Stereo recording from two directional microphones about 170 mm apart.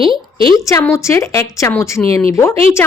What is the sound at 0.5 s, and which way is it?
A woman's voice, 15° left (ahead or behind).